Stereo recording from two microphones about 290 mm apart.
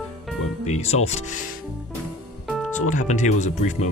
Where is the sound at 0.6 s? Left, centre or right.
Left.